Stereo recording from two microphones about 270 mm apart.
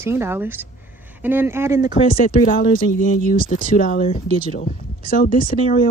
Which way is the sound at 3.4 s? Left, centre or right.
Left.